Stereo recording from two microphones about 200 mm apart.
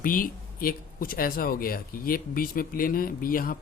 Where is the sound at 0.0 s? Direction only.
45° left (ahead or behind).